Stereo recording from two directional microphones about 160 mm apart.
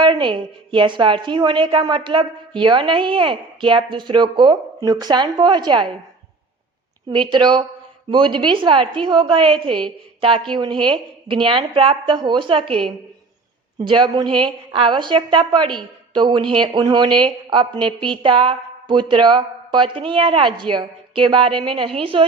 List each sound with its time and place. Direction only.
0.0 s a woman's voice: 30° right (ahead or behind)
7.1 s a woman's voice: 30° right (ahead or behind)
13.8 s a woman's voice: 30° right (ahead or behind)